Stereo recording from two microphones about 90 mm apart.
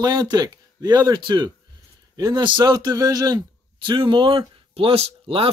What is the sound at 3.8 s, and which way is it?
Speech, 65° right (ahead or behind).